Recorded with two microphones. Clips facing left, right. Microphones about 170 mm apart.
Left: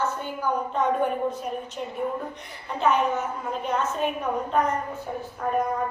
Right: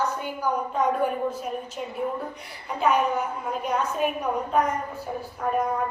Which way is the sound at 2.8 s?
10° right (ahead or behind).